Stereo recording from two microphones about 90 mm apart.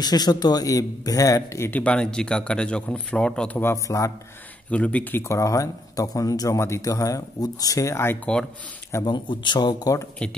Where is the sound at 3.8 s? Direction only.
35° left (ahead or behind).